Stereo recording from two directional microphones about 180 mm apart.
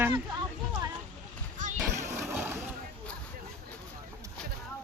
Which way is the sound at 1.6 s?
45° right (ahead or behind).